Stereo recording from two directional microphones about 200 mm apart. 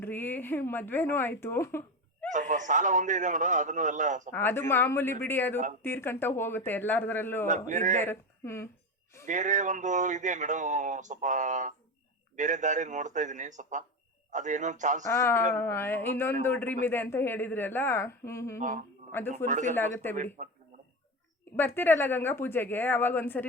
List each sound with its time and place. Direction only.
0.0 s speech: 10° left (ahead or behind)
2.3 s speech: 40° right (ahead or behind)
4.3 s speech: 10° left (ahead or behind)
7.7 s speech: 35° right (ahead or behind)
8.0 s speech: 10° left (ahead or behind)
9.2 s speech: 40° right (ahead or behind)
15.1 s speech: 15° left (ahead or behind)
19.5 s speech: 40° right (ahead or behind)
21.5 s speech: 10° left (ahead or behind)